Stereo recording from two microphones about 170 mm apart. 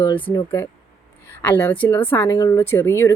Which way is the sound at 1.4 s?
10° left (ahead or behind).